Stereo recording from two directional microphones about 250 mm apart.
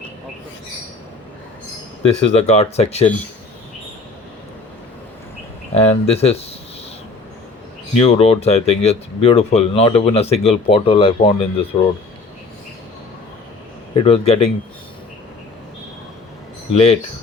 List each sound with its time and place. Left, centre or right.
2.0 s speech: left
5.7 s speech: left
7.9 s speech: left
13.9 s speech: left
16.7 s speech: left